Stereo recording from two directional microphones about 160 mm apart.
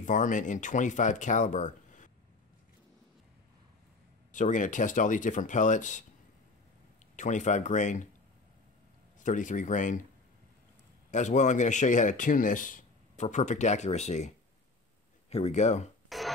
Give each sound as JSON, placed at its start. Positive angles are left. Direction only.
{"t": 0.0, "sound": "speech", "side_deg": 50}
{"t": 4.3, "sound": "speech", "side_deg": 55}
{"t": 7.2, "sound": "speech", "side_deg": 50}
{"t": 9.2, "sound": "speech", "side_deg": 50}
{"t": 11.1, "sound": "speech", "side_deg": 50}
{"t": 16.1, "sound": "music", "side_deg": 0}